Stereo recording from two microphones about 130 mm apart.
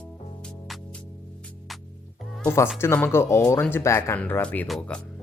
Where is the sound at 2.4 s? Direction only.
20° left (ahead or behind).